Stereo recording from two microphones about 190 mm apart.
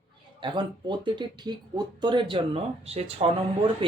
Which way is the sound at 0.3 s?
25° right (ahead or behind).